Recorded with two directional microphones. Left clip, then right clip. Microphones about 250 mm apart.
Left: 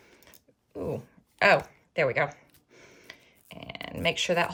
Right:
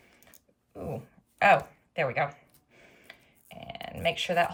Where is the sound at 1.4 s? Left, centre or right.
Centre.